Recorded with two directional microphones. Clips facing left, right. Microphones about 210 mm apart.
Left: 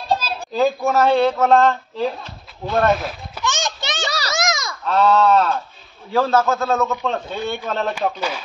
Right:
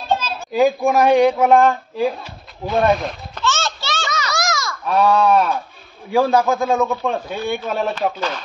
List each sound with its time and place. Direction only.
0.5 s speech: 15° right (ahead or behind)
3.0 s speech: 5° left (ahead or behind)
3.4 s a sound: 15° left (ahead or behind)
4.3 s honk: 20° left (ahead or behind)
4.8 s a man's voice: 15° right (ahead or behind)